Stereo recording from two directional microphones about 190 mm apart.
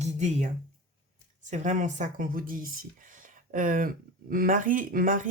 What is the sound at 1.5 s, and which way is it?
Speech, 40° right (ahead or behind).